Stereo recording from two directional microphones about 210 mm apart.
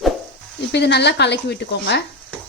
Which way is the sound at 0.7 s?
55° left (ahead or behind).